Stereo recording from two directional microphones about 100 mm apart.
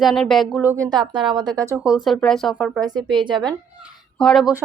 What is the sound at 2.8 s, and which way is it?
Speech, 50° right (ahead or behind).